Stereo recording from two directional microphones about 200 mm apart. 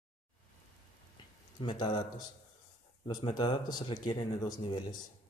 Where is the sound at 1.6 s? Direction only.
25° left (ahead or behind).